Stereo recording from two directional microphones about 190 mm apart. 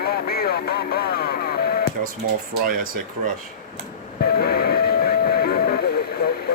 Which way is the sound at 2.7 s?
45° right (ahead or behind).